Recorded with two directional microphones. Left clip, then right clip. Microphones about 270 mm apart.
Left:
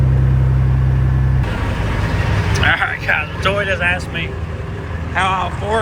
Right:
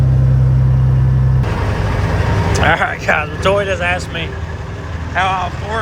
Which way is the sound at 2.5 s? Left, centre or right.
Right.